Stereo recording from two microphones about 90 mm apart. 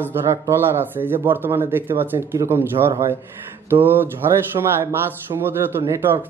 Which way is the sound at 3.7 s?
25° right (ahead or behind).